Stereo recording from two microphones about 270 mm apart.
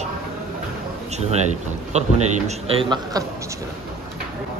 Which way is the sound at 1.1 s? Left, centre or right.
Right.